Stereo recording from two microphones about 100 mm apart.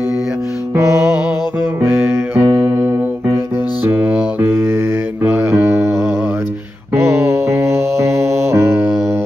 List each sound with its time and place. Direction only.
1.9 s music: 25° right (ahead or behind)
6.9 s mantra: 25° right (ahead or behind)